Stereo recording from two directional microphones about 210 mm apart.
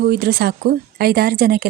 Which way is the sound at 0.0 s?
45° right (ahead or behind).